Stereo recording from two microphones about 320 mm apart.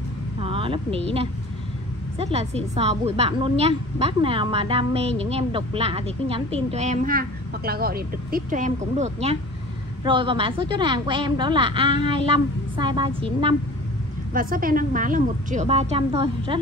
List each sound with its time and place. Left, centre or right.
0.4 s a woman's voice: centre
14.3 s a woman's voice: right